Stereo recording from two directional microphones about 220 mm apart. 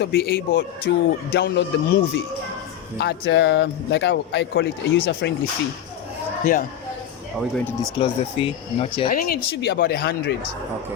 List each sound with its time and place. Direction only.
0.0 s speech: 45° left (ahead or behind)
6.4 s speech: 40° left (ahead or behind)
7.6 s speech: centre (ahead or behind)
7.9 s speech: 25° left (ahead or behind)
9.0 s speech: 45° left (ahead or behind)